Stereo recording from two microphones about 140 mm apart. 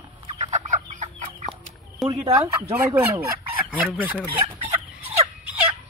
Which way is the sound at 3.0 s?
15° right (ahead or behind).